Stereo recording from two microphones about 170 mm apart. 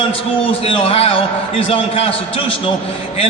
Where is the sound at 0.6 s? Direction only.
30° left (ahead or behind).